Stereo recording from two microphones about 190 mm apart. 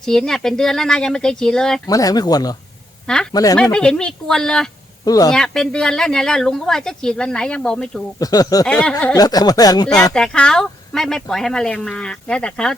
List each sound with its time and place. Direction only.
0.0 s speech: centre (ahead or behind)
1.9 s speech: 20° left (ahead or behind)
3.6 s speech: 5° left (ahead or behind)
5.0 s speech: 20° left (ahead or behind)
5.3 s speech: 5° left (ahead or behind)
8.2 s speech: 20° left (ahead or behind)
8.6 s speech: 5° left (ahead or behind)
9.1 s speech: 20° left (ahead or behind)
10.2 s speech: 5° left (ahead or behind)